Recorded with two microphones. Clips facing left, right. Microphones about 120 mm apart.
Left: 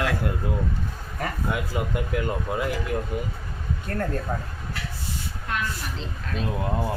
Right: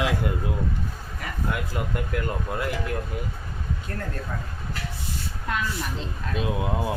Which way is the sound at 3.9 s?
50° left (ahead or behind).